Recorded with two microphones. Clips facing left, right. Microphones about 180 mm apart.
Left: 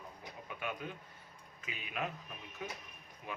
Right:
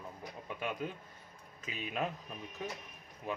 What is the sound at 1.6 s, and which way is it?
Speech, 35° right (ahead or behind).